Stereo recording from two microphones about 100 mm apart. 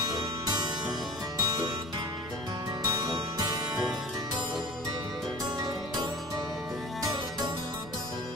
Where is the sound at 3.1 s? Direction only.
45° right (ahead or behind).